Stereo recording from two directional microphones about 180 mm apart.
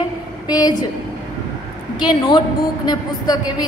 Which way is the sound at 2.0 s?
25° left (ahead or behind).